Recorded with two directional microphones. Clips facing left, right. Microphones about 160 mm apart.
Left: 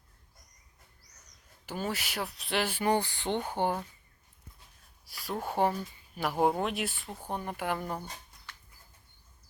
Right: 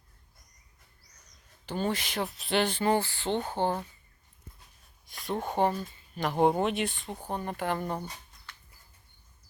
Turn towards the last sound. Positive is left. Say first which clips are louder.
# right 2 dB
turn(degrees=5)  # may be behind; listen again after turning